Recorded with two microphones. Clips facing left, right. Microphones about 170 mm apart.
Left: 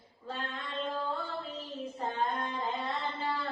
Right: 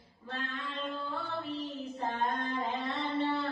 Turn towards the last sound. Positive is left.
turn(degrees=-75)  # may be behind; listen again after turning